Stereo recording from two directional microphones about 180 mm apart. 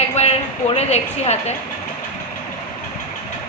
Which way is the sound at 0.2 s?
35° left (ahead or behind).